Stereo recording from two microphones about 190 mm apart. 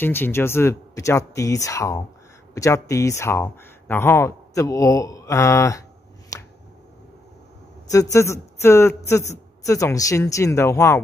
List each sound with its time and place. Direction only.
0.0 s speech: 10° left (ahead or behind)
6.3 s finger snapping: 15° left (ahead or behind)
7.9 s speech: 15° left (ahead or behind)